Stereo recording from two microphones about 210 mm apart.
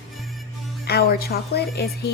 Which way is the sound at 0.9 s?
45° left (ahead or behind).